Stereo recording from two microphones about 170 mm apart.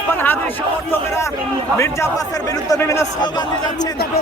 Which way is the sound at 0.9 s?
15° left (ahead or behind).